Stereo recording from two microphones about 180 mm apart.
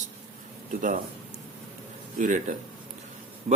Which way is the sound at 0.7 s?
45° right (ahead or behind).